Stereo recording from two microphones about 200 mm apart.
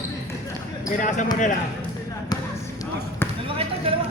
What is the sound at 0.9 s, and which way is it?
Speech, 40° left (ahead or behind).